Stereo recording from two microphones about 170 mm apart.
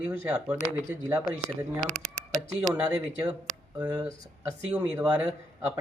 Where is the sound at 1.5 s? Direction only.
45° right (ahead or behind).